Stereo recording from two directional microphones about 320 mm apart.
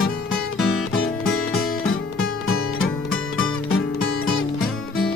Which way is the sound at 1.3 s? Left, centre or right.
Left.